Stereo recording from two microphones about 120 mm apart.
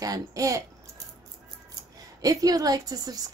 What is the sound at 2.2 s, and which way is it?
Speech, 30° right (ahead or behind).